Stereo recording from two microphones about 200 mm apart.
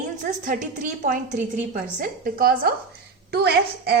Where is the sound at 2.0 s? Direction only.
45° right (ahead or behind).